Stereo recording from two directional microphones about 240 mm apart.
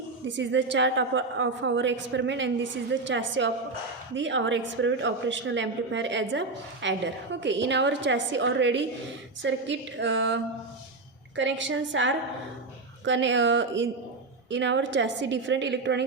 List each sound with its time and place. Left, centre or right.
0.3 s a woman's voice: right